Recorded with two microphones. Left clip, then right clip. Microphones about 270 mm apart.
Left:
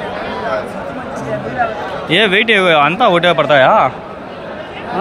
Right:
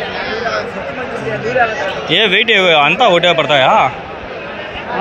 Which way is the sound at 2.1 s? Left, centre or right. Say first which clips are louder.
Even; centre.